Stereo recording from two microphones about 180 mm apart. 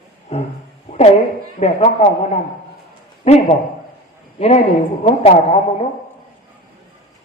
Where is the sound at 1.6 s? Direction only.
40° left (ahead or behind).